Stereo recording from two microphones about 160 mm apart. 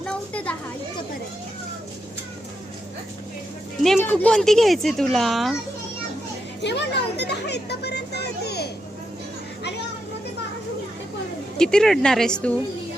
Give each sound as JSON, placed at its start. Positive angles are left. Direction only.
{"t": 0.0, "sound": "children playing", "side_deg": 5}
{"t": 4.0, "sound": "speech", "side_deg": 5}
{"t": 6.6, "sound": "a sound", "side_deg": 90}
{"t": 11.5, "sound": "speech", "side_deg": 5}